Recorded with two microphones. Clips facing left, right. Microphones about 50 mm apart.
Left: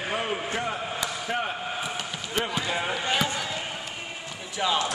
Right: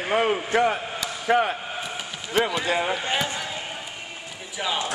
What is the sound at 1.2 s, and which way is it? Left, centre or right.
Speech, right.